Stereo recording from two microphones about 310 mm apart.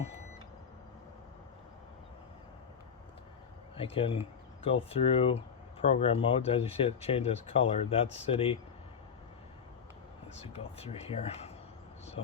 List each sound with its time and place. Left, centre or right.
3.8 s speech: centre
10.3 s speech: centre